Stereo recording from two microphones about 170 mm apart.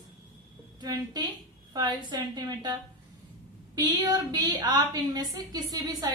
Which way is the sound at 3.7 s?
25° right (ahead or behind).